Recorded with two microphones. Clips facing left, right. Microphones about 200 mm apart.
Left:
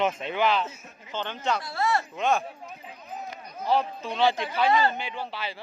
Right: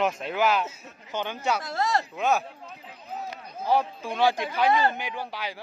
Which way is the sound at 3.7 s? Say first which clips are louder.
Right 1 dB; 10° right (ahead or behind).